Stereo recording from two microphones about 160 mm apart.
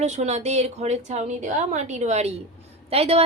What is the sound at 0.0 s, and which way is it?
A woman's voice, 45° right (ahead or behind).